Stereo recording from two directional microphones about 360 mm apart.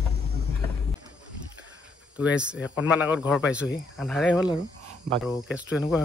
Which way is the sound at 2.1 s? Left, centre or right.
Centre.